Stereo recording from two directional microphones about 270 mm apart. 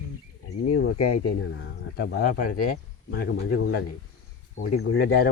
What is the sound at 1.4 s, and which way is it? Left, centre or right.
Speech, left.